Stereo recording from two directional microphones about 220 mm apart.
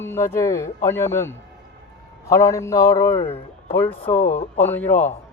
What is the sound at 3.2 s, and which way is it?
Speech, 25° left (ahead or behind).